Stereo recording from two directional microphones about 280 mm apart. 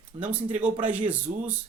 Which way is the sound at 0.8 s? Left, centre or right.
Centre.